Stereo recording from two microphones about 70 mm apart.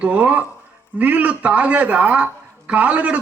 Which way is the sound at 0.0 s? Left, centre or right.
Centre.